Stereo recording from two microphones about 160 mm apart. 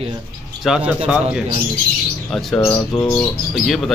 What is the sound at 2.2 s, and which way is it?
A man's voice, 5° left (ahead or behind).